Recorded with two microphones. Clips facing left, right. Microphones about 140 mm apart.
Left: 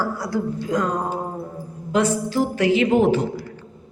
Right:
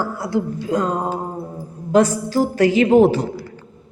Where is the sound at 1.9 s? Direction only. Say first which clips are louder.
Right 4 dB; 40° right (ahead or behind).